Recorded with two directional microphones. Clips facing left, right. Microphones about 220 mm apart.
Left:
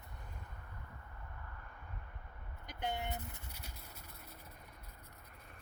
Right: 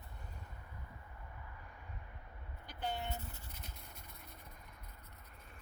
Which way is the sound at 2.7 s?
20° left (ahead or behind).